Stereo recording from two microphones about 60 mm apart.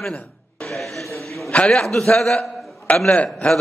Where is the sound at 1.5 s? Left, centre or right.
Centre.